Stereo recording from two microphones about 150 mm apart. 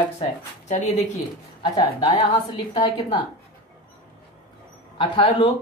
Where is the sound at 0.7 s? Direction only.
45° left (ahead or behind).